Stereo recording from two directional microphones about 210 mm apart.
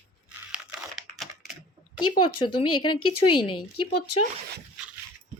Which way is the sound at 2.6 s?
90° left.